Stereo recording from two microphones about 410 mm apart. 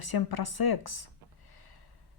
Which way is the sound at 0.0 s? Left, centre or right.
Left.